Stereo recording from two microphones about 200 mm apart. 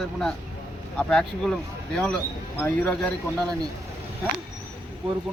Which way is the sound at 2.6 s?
10° left (ahead or behind).